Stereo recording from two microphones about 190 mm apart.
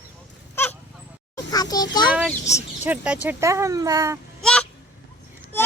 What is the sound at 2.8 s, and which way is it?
Speech, 10° right (ahead or behind).